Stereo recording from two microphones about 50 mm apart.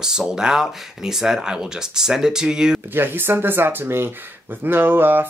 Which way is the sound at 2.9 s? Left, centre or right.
Right.